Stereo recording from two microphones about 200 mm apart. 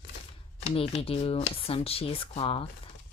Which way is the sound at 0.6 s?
30° left (ahead or behind).